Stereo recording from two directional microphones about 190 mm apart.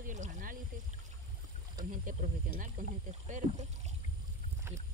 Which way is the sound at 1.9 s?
45° right (ahead or behind).